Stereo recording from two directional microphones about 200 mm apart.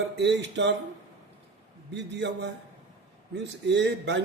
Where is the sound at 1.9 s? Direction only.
60° right (ahead or behind).